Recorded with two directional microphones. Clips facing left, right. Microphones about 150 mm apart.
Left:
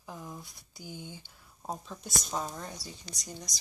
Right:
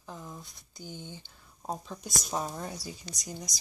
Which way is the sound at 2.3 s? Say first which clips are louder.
Right 3 dB; 15° right (ahead or behind).